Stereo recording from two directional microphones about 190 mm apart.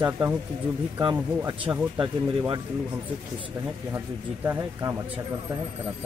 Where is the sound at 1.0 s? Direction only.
25° right (ahead or behind).